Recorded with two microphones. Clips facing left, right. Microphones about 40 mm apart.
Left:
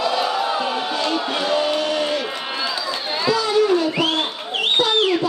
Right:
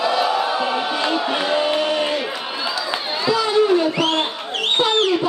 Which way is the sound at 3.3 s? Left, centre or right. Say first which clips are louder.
Right 1 dB; centre.